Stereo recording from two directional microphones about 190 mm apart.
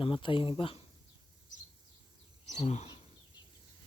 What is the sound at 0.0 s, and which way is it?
Speech, 25° left (ahead or behind).